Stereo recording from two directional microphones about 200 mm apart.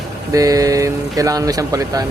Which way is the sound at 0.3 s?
15° right (ahead or behind).